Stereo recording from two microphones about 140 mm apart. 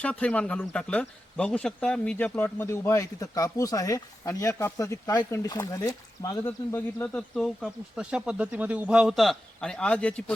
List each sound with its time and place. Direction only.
0.0 s speech: 10° left (ahead or behind)
7.3 s speech: centre (ahead or behind)